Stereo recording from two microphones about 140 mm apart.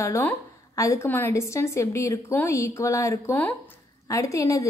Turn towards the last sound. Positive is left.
turn(degrees=25)  # may be behind; listen again after turning